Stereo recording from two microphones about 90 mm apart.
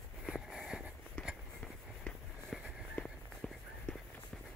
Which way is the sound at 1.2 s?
10° left (ahead or behind).